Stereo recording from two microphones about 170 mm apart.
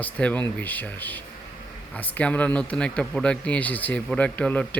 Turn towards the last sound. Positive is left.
turn(degrees=10)  # may be behind; listen again after turning